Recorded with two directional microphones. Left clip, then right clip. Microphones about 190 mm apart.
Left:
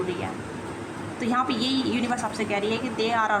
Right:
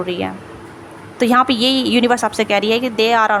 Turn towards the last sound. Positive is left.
turn(degrees=-35)  # may be behind; listen again after turning